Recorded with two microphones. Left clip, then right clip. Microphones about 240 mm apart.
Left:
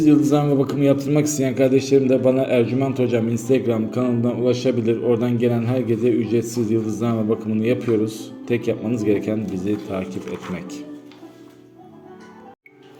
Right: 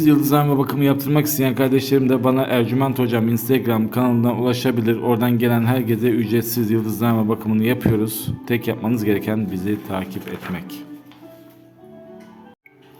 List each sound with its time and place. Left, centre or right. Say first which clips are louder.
0.0 s a man's voice: even; right